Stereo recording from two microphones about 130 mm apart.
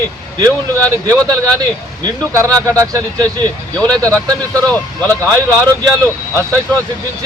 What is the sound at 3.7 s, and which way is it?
Speech, 10° left (ahead or behind).